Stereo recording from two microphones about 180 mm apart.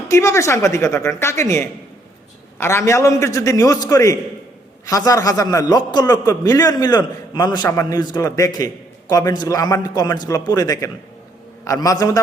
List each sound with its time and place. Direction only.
0.1 s a man's voice: 15° left (ahead or behind)